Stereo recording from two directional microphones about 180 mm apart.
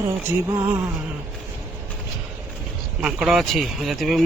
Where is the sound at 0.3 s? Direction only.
15° right (ahead or behind).